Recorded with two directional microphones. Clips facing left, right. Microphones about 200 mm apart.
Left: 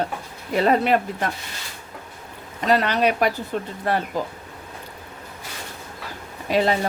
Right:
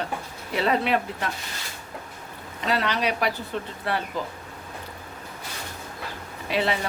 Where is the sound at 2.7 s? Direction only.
45° left (ahead or behind).